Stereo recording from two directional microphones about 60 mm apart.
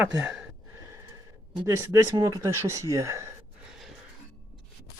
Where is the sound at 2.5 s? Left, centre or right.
Right.